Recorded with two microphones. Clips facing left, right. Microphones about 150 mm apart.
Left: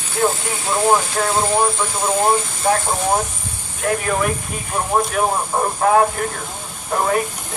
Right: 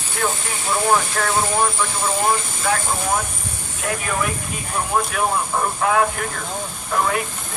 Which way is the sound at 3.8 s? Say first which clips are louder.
Left 5 dB; 45° left (ahead or behind).